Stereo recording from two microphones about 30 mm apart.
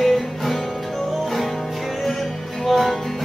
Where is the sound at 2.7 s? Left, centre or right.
Centre.